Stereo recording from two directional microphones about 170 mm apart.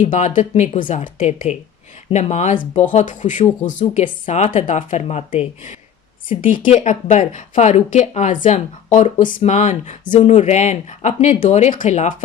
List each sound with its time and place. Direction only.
0.0 s speech: 45° left (ahead or behind)
1.2 s speech: 40° left (ahead or behind)
6.2 s speech: 50° left (ahead or behind)